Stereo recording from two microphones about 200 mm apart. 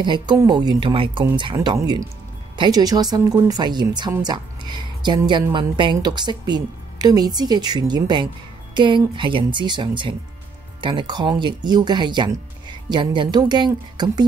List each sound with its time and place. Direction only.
0.0 s speech: 20° right (ahead or behind)